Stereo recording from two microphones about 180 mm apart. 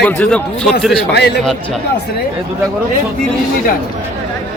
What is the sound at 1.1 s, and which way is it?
Speech, 65° left (ahead or behind).